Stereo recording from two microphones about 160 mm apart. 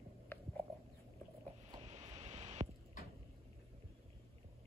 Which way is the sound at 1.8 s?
45° right (ahead or behind).